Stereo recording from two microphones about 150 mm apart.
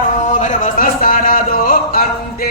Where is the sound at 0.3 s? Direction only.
55° left (ahead or behind); by 2.0 s 70° left (ahead or behind).